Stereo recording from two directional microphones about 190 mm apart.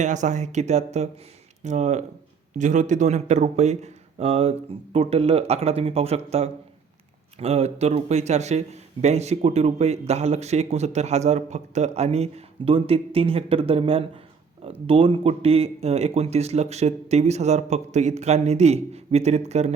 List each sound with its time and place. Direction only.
0.0 s a man's voice: 40° right (ahead or behind)